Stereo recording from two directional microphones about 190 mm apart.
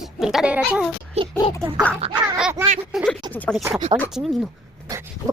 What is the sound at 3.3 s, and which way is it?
Speech, 5° left (ahead or behind).